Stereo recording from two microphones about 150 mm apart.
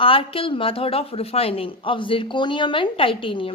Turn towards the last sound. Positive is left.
turn(degrees=35)  # may be behind; listen again after turning